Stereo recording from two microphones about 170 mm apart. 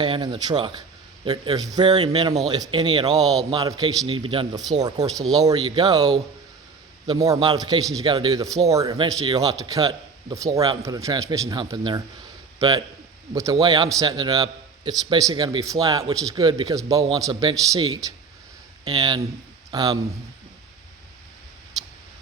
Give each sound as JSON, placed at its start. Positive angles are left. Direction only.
{"t": 0.0, "sound": "a man's voice", "side_deg": -25}